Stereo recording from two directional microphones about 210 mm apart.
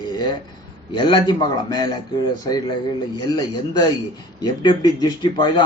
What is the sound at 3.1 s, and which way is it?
Speech, 20° left (ahead or behind).